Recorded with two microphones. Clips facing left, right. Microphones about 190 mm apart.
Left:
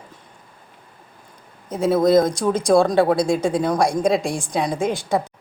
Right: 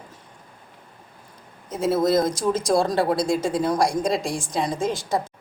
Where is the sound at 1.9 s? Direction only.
55° left (ahead or behind).